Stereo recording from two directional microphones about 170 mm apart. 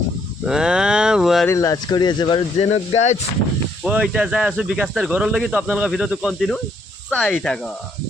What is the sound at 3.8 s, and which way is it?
A man's voice, 5° right (ahead or behind).